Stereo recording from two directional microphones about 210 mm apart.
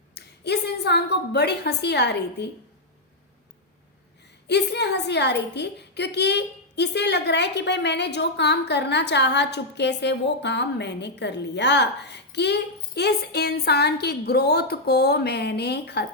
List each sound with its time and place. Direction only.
0.1 s a woman's voice: 50° left (ahead or behind)
4.4 s a woman's voice: 55° left (ahead or behind)